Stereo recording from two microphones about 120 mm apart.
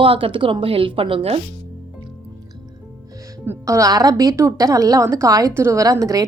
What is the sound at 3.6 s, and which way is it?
A woman's voice, 25° right (ahead or behind).